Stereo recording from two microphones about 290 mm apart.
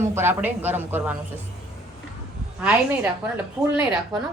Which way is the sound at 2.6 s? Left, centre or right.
Centre.